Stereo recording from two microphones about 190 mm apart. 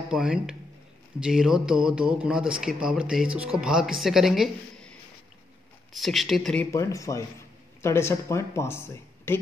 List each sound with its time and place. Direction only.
0.1 s speech: 5° right (ahead or behind)
5.9 s speech: centre (ahead or behind)